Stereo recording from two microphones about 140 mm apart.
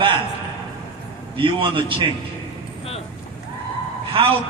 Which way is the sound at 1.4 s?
40° right (ahead or behind).